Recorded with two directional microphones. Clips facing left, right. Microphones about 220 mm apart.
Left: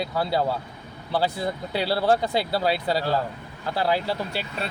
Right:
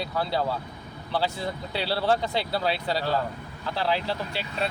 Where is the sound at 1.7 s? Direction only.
45° left (ahead or behind).